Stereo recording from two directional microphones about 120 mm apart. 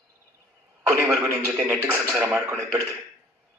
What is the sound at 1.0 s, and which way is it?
A man's voice, 15° right (ahead or behind).